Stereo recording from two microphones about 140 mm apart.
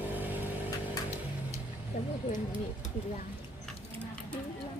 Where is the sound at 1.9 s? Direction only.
70° left (ahead or behind).